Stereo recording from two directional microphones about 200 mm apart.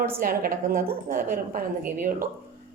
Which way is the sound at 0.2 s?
45° right (ahead or behind).